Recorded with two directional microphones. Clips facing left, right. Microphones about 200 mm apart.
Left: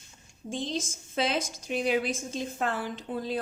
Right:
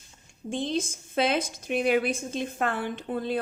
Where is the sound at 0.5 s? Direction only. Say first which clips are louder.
Right 4 dB; 60° right (ahead or behind).